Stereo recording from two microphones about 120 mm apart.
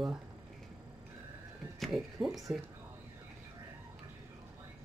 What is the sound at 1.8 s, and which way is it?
Speech, centre (ahead or behind).